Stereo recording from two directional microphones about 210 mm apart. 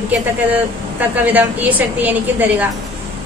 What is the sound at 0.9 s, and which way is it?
A woman's voice, 10° right (ahead or behind).